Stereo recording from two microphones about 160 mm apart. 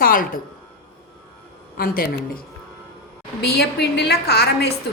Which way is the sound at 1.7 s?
65° left (ahead or behind).